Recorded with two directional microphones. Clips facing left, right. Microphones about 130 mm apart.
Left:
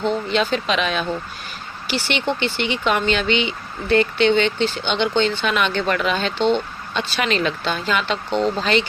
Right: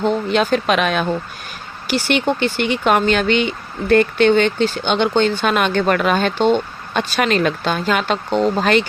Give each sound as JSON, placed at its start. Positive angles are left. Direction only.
{"t": 0.0, "sound": "speech", "side_deg": -50}